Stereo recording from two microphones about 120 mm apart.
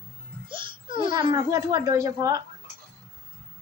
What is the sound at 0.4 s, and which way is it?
Music, 45° right (ahead or behind).